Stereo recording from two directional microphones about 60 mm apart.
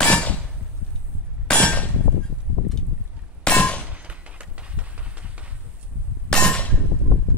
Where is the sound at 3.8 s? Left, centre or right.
Right.